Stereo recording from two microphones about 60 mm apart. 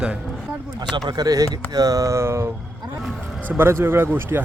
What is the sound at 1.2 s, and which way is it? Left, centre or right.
Speech, right.